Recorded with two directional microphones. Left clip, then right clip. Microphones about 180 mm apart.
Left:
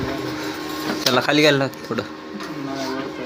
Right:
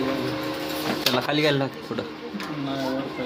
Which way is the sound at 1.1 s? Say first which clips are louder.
Left 8 dB; 25° left (ahead or behind).